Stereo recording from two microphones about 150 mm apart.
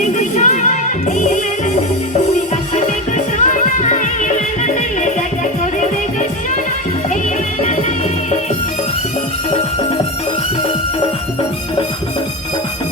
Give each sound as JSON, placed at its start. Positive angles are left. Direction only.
{"t": 0.0, "sound": "music", "side_deg": 55}